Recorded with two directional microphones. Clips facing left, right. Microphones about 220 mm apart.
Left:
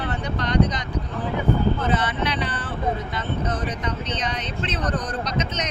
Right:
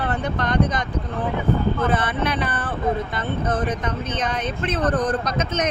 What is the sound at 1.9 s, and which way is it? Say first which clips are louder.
Speech: right 1 dB; 55° right (ahead or behind).